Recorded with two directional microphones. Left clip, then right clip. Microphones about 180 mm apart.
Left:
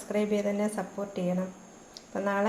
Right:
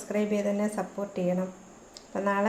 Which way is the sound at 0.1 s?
5° right (ahead or behind).